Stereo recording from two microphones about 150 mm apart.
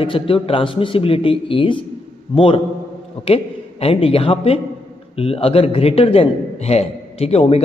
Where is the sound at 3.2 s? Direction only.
40° left (ahead or behind).